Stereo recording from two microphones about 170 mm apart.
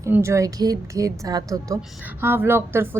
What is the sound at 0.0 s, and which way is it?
A woman's voice, 15° right (ahead or behind).